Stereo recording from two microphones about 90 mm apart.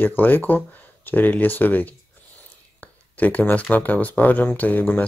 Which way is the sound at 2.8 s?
15° left (ahead or behind).